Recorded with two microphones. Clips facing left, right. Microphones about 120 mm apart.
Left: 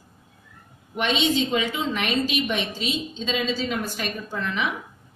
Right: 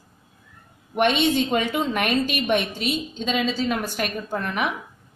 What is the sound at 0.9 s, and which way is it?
A woman's voice, 50° right (ahead or behind).